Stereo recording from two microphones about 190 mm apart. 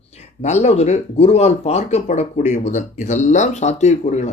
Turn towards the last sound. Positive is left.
turn(degrees=35)  # may be behind; listen again after turning